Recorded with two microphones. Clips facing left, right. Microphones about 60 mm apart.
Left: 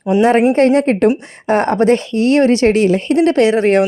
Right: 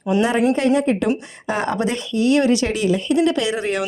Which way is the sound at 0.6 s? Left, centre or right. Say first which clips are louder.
Left 6 dB; left.